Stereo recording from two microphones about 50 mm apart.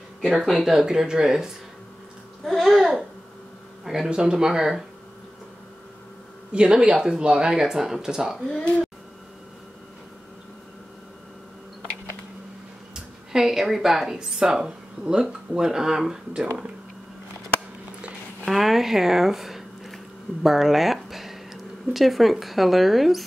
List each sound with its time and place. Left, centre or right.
0.3 s speech: centre
2.4 s speech: centre
6.5 s speech: centre
8.5 s speech: left
12.9 s speech: centre
18.5 s speech: centre